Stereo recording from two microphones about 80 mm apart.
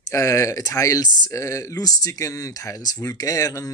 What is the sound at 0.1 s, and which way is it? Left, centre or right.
Speech, left.